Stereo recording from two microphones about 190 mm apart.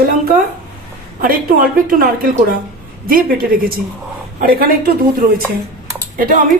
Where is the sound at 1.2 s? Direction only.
45° right (ahead or behind).